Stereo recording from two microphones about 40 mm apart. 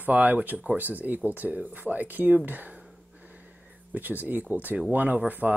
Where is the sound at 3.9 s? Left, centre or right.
Right.